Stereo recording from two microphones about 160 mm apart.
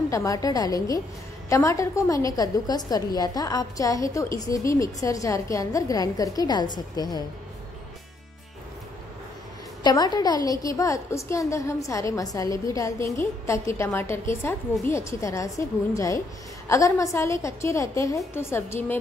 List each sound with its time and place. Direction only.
0.1 s a woman's voice: 20° left (ahead or behind)
9.8 s a woman's voice: 25° left (ahead or behind)